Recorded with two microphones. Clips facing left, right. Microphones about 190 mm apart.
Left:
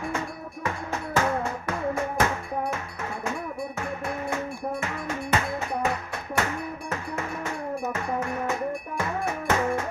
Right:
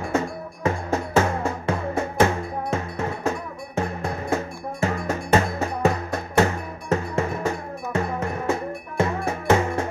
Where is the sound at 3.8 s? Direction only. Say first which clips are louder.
Right 9 dB; 35° right (ahead or behind).